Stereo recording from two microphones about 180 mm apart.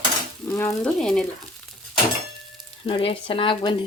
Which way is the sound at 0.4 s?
15° left (ahead or behind).